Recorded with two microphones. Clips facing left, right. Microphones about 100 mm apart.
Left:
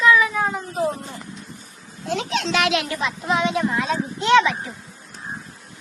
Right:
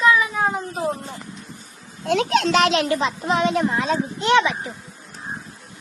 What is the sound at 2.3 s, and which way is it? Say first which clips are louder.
Speech: right 5 dB; 50° right (ahead or behind).